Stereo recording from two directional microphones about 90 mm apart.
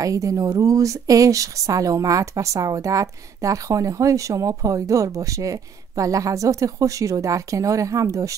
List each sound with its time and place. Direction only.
0.0 s a woman's voice: 40° right (ahead or behind)